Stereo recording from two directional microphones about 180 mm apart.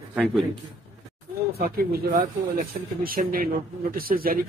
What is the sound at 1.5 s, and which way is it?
Speech, 55° right (ahead or behind).